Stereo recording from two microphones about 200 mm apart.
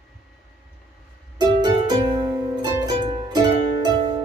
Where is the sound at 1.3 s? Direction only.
20° right (ahead or behind).